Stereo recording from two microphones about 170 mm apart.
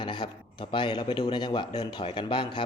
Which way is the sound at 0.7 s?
30° left (ahead or behind).